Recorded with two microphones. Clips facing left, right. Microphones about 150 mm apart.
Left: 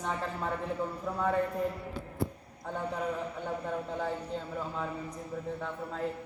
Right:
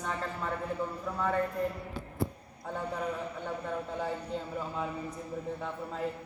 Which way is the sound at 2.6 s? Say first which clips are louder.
Even; 5° right (ahead or behind).